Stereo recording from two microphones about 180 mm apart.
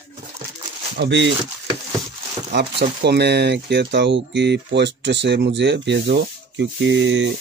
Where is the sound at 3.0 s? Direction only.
65° right (ahead or behind); by 7.3 s 90° right.